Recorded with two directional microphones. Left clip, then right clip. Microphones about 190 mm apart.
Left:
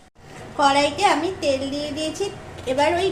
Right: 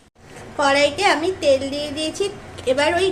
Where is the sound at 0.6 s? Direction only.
20° right (ahead or behind).